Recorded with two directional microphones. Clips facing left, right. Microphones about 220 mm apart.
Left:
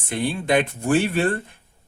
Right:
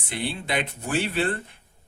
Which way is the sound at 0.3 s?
50° left (ahead or behind).